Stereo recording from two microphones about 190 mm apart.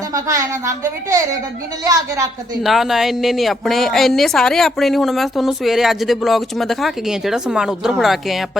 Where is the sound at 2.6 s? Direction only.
Centre (ahead or behind).